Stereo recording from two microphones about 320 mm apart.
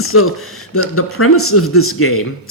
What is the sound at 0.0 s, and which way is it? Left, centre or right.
Speech, left.